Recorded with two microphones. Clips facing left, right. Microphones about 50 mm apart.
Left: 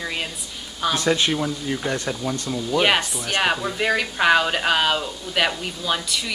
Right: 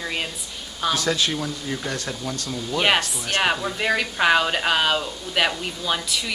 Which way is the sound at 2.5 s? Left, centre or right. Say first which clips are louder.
Left 1 dB; centre.